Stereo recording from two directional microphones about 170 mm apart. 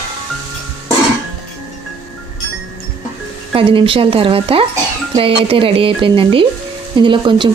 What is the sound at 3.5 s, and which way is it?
A woman's voice, 30° right (ahead or behind).